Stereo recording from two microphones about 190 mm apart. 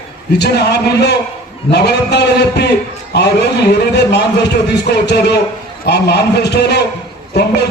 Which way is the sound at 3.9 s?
60° left (ahead or behind).